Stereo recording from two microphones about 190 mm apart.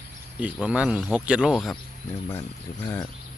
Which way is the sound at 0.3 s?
5° right (ahead or behind).